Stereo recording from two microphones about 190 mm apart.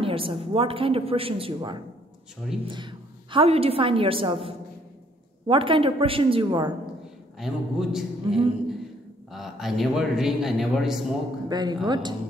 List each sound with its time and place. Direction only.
0.0 s a woman's voice: 30° right (ahead or behind)
7.3 s a man's voice: centre (ahead or behind)
11.4 s a woman's voice: 20° right (ahead or behind)